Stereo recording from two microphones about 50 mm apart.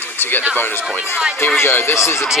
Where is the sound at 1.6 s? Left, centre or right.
Left.